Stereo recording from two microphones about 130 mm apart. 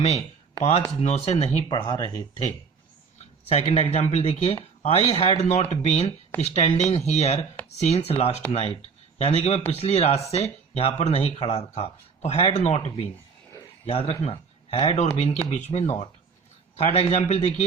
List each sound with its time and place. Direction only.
0.6 s speech: 55° left (ahead or behind)
1.7 s speech: 40° left (ahead or behind)
3.5 s speech: 50° left (ahead or behind)
5.5 s speech: 60° left (ahead or behind)